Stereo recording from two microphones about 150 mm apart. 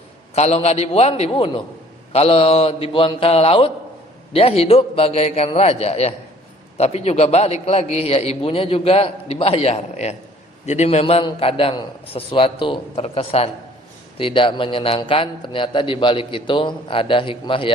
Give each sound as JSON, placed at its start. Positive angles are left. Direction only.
{"t": 0.3, "sound": "a man's voice", "side_deg": 45}